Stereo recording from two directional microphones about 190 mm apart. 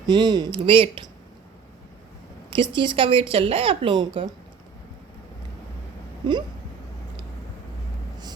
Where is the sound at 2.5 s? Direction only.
25° right (ahead or behind).